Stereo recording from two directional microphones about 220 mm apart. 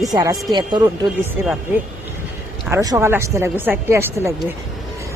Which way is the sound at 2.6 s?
15° right (ahead or behind).